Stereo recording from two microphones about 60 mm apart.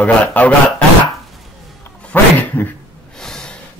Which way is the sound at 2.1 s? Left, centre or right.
Left.